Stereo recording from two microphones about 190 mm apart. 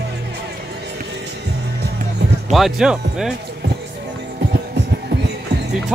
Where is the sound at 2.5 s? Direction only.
Centre (ahead or behind).